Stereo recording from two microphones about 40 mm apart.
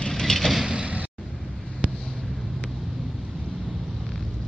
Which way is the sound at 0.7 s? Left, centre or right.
Right.